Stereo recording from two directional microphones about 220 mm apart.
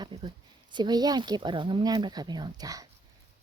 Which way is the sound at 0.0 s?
20° right (ahead or behind).